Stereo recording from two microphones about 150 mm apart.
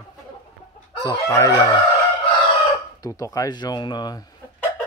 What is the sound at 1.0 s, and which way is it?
Speech, 25° left (ahead or behind).